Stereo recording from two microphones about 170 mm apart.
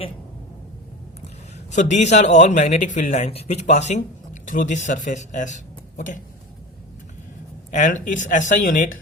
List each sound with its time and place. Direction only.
1.7 s a man's voice: 45° left (ahead or behind)
7.7 s a man's voice: 45° left (ahead or behind)